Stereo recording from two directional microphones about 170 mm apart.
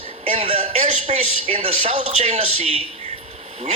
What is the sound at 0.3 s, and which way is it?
A man's voice, 35° right (ahead or behind).